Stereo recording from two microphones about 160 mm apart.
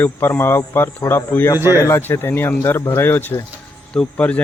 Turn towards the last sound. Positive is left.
turn(degrees=10)  # may be behind; listen again after turning